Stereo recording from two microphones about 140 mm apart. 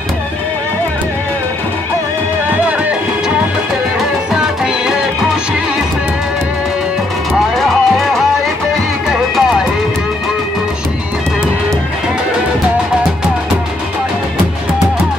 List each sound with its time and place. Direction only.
4.3 s music: 5° right (ahead or behind)
7.5 s music: centre (ahead or behind)
9.3 s music: centre (ahead or behind)